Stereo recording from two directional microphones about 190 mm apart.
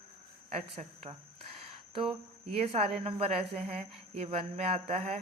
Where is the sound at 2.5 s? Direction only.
30° right (ahead or behind).